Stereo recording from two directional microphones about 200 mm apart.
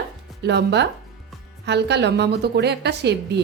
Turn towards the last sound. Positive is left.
turn(degrees=-55)  # may be behind; listen again after turning